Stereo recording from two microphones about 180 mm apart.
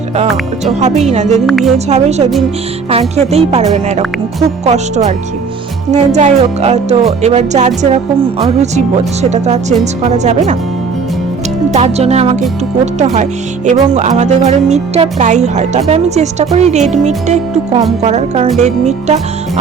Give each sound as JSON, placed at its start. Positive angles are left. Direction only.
{"t": 0.6, "sound": "speech", "side_deg": -40}
{"t": 1.5, "sound": "speech", "side_deg": 0}
{"t": 1.9, "sound": "speech", "side_deg": -35}
{"t": 5.9, "sound": "speech", "side_deg": -40}
{"t": 11.7, "sound": "speech", "side_deg": -35}